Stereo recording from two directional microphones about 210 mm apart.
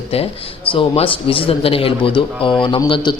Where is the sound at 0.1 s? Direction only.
30° left (ahead or behind).